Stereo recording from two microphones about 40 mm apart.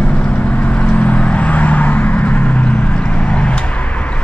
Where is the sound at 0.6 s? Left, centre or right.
Left.